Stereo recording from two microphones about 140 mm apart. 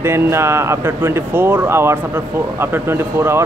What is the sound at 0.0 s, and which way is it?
Speech, 20° right (ahead or behind).